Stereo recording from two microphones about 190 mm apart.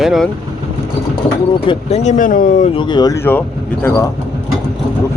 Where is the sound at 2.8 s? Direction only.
25° left (ahead or behind).